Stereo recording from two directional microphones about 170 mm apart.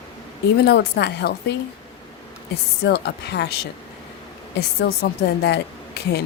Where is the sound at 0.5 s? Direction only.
75° left (ahead or behind).